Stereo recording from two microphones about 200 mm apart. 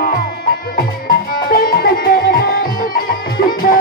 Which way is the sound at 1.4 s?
45° left (ahead or behind).